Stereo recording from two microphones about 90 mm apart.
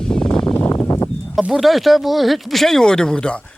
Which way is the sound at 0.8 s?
25° left (ahead or behind).